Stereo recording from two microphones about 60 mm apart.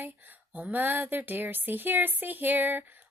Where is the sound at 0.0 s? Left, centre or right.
Right.